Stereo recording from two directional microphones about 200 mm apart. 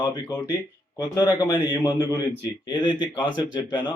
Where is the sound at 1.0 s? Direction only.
20° left (ahead or behind).